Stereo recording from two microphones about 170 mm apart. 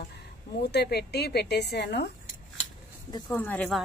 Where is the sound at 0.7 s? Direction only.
70° left (ahead or behind).